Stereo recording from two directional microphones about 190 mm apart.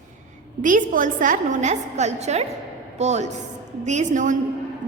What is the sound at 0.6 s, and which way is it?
A woman's voice, 45° right (ahead or behind).